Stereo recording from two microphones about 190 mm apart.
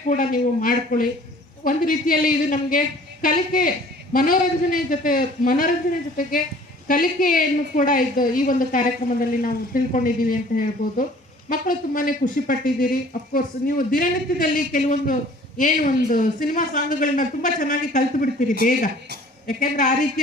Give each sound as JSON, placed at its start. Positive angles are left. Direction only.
{"t": 0.1, "sound": "speech", "side_deg": 45}
{"t": 6.8, "sound": "speech", "side_deg": 45}
{"t": 19.5, "sound": "speech", "side_deg": 45}